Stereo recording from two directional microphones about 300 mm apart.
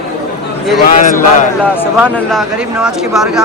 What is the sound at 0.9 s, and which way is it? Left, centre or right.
Speech, left.